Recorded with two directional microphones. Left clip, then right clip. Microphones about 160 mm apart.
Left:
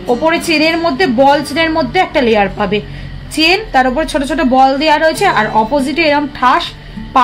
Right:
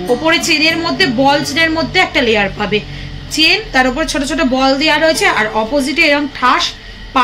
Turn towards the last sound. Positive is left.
turn(degrees=75)  # may be behind; listen again after turning